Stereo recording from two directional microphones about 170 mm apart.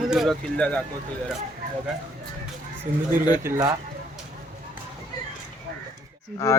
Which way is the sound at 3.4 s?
20° right (ahead or behind).